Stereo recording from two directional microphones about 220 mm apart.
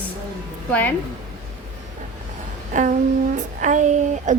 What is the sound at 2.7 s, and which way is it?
Child singing, 35° right (ahead or behind).